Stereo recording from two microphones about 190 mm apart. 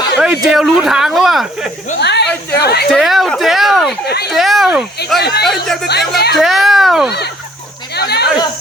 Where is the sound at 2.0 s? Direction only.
65° left (ahead or behind).